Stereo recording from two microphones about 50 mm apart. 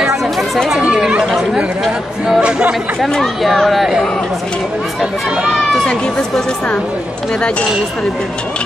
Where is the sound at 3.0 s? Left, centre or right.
Centre.